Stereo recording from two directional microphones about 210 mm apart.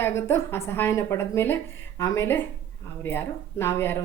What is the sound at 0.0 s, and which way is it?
A woman's voice, 10° left (ahead or behind).